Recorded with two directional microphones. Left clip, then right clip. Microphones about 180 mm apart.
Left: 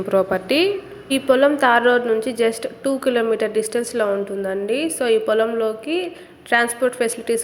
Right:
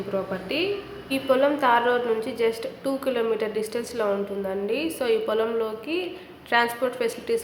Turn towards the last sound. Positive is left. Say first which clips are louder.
# left 4 dB
turn(degrees=30)  # may be behind; listen again after turning